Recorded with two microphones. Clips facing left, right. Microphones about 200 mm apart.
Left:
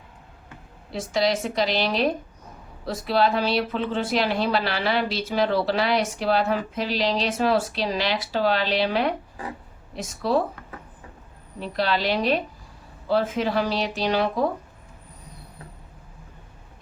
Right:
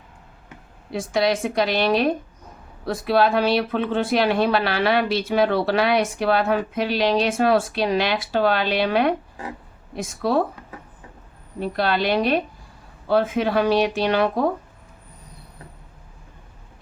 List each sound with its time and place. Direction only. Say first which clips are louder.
0.9 s a woman's voice: right 2 dB; 55° right (ahead or behind)
11.6 s speech: right 3 dB; 55° right (ahead or behind)